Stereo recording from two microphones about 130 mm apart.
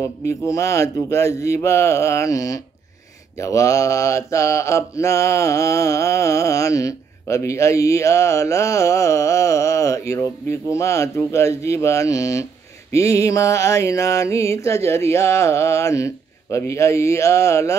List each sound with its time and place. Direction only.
0.3 s mantra: 25° left (ahead or behind)